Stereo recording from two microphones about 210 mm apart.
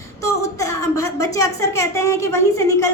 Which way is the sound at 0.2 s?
15° left (ahead or behind).